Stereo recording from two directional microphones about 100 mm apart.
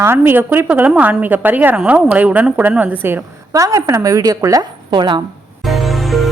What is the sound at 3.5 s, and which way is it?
A woman's voice, 30° right (ahead or behind).